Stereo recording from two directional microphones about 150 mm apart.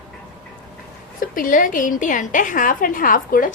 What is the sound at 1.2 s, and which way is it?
A woman's voice, 65° left (ahead or behind).